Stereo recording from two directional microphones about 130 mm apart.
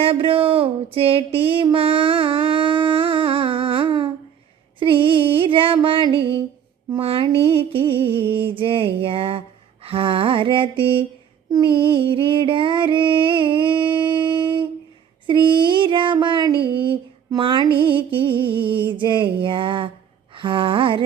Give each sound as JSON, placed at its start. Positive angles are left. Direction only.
{"t": 0.0, "sound": "a sound", "side_deg": -45}
{"t": 7.0, "sound": "music", "side_deg": -45}
{"t": 9.8, "sound": "mantra", "side_deg": -45}
{"t": 11.5, "sound": "music", "side_deg": -40}
{"t": 15.3, "sound": "child singing", "side_deg": -40}
{"t": 20.3, "sound": "a sound", "side_deg": -40}